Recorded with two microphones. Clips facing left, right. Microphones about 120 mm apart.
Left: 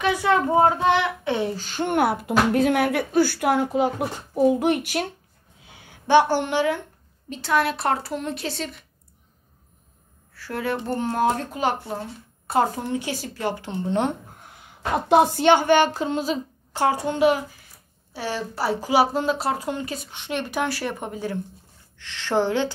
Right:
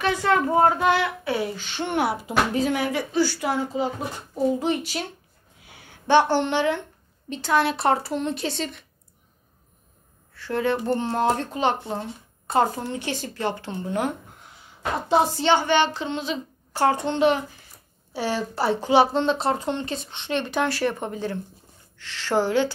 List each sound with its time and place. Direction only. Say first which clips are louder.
0.0 s a child's voice: left 1 dB; 10° left (ahead or behind)
1.5 s speech: left 3 dB; 40° left (ahead or behind); by 5.0 s 60° left (ahead or behind)
5.7 s a woman's voice: left 1 dB; 15° left (ahead or behind)
10.3 s a woman's voice: right 3 dB; 5° left (ahead or behind)
13.8 s speech: left 3 dB; 25° left (ahead or behind)
15.0 s speech: left 4 dB; 60° left (ahead or behind); by 16.3 s 40° left (ahead or behind)
16.7 s a woman's voice: right 1 dB; 10° left (ahead or behind)